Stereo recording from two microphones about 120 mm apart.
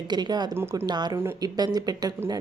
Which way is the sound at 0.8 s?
35° right (ahead or behind).